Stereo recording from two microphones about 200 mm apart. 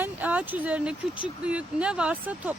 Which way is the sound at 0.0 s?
10° right (ahead or behind).